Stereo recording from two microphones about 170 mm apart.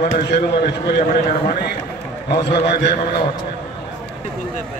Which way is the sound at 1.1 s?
55° left (ahead or behind).